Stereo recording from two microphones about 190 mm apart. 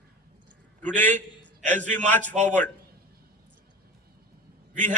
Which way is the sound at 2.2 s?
40° right (ahead or behind).